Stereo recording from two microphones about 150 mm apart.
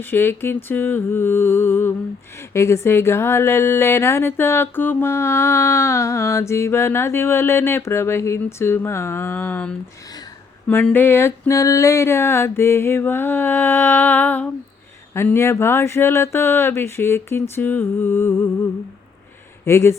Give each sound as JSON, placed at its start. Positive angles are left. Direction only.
{"t": 0.0, "sound": "speech", "side_deg": 15}
{"t": 19.6, "sound": "speech", "side_deg": 20}